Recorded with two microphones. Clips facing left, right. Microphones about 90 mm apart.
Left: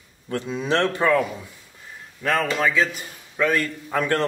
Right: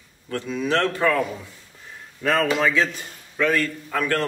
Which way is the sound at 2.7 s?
10° left (ahead or behind).